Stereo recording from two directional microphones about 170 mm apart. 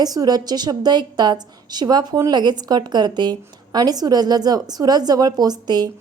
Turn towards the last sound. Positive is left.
turn(degrees=-25)  # may be behind; listen again after turning